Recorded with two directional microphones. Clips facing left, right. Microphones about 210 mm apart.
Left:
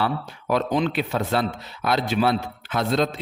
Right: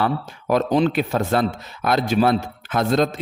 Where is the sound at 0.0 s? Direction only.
45° right (ahead or behind).